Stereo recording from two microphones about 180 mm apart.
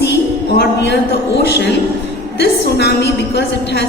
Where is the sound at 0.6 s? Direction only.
75° left (ahead or behind).